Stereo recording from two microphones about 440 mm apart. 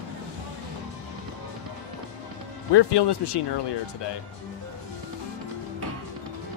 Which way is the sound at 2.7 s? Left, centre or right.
Left.